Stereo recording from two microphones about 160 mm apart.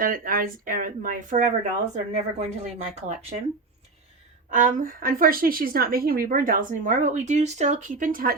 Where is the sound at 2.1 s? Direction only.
45° right (ahead or behind).